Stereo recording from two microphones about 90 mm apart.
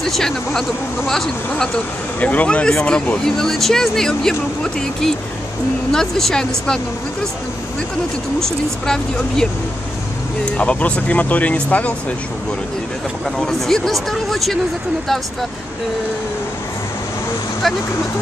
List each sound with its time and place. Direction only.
0.0 s speech: 5° left (ahead or behind)
2.1 s speech: 15° left (ahead or behind)
8.8 s speech: 5° left (ahead or behind)
10.6 s speech: 15° left (ahead or behind)
13.4 s speech: 5° left (ahead or behind)